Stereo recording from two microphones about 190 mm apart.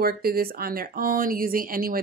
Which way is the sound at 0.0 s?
55° right (ahead or behind).